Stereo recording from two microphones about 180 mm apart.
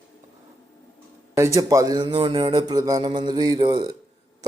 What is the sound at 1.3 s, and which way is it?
A man's voice, 15° right (ahead or behind).